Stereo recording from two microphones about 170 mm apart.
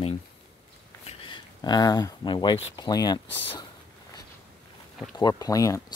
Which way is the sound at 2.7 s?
25° left (ahead or behind).